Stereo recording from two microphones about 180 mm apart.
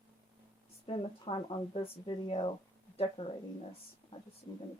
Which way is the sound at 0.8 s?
30° left (ahead or behind).